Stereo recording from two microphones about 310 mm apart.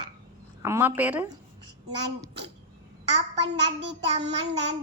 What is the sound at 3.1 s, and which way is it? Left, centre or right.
Speech, right.